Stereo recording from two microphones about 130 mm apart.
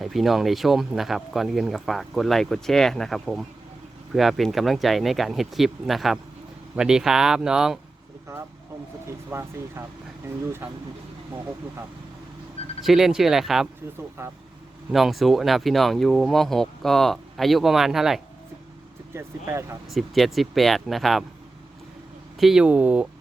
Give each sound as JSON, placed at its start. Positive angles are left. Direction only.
{"t": 0.0, "sound": "speech", "side_deg": 0}
{"t": 9.0, "sound": "speech", "side_deg": -20}
{"t": 12.8, "sound": "speech", "side_deg": -5}
{"t": 14.2, "sound": "speech", "side_deg": -20}
{"t": 14.9, "sound": "speech", "side_deg": 0}
{"t": 19.1, "sound": "speech", "side_deg": -20}
{"t": 19.9, "sound": "speech", "side_deg": 0}
{"t": 22.4, "sound": "speech", "side_deg": -5}